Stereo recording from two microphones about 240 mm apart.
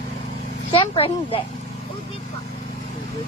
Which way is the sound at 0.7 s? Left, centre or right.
Left.